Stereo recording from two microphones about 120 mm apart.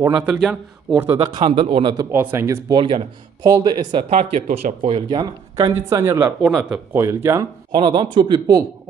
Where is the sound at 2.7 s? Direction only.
50° right (ahead or behind).